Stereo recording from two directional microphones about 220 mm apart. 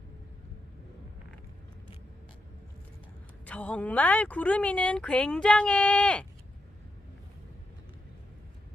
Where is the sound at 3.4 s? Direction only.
5° left (ahead or behind).